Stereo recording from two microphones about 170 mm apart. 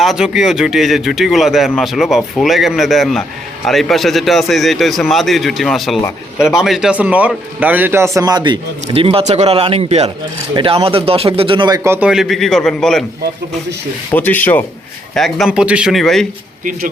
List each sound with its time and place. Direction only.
0.0 s speech: centre (ahead or behind)
14.1 s speech: 10° left (ahead or behind)